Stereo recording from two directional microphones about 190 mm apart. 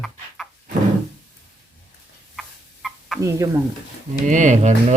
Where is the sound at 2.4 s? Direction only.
Centre (ahead or behind).